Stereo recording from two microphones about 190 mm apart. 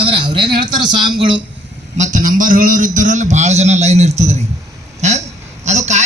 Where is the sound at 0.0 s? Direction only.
25° right (ahead or behind).